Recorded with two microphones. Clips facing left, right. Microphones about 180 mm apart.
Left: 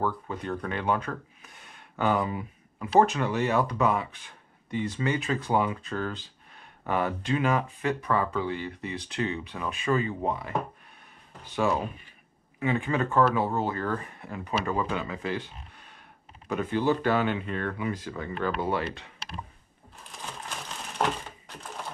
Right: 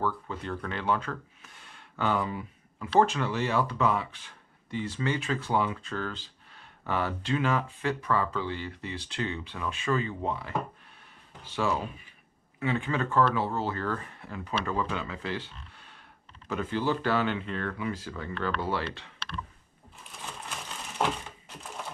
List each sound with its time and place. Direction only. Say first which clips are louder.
0.0 s speech: left 2 dB; 15° left (ahead or behind)
11.5 s speech: left 3 dB; 15° left (ahead or behind)
16.4 s speech: left 3 dB; 15° left (ahead or behind)
20.4 s a sound: left 2 dB; centre (ahead or behind)